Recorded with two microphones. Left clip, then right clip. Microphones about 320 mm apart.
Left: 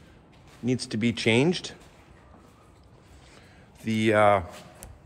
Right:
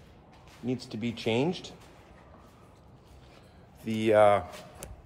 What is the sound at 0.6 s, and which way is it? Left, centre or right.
Speech, left.